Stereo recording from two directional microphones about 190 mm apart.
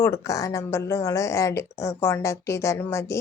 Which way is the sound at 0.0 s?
15° left (ahead or behind).